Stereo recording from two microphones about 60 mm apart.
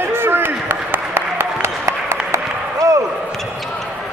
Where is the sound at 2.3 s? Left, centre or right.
Right.